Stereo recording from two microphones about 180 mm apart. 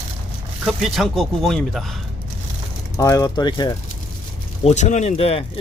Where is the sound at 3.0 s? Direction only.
20° left (ahead or behind).